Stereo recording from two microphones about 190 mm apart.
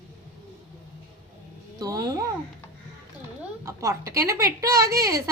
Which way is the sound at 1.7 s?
20° right (ahead or behind).